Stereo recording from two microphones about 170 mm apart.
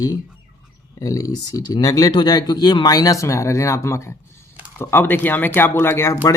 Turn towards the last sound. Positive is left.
turn(degrees=15)  # may be behind; listen again after turning